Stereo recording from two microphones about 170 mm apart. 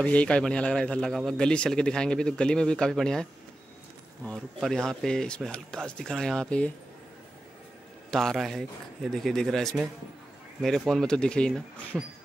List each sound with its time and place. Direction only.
0.0 s speech: 5° left (ahead or behind)
8.1 s speech: centre (ahead or behind)